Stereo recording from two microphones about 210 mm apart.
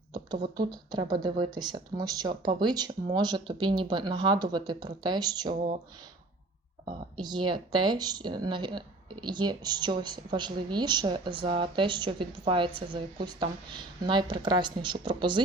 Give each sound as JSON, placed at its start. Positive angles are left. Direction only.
{"t": 0.5, "sound": "speech", "side_deg": -20}
{"t": 7.2, "sound": "speech", "side_deg": -20}